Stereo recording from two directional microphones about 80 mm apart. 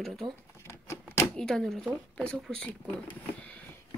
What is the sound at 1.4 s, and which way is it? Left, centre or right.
Speech, centre.